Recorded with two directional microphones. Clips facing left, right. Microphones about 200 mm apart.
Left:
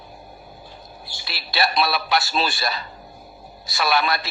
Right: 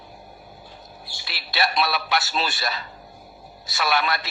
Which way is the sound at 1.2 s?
35° left (ahead or behind).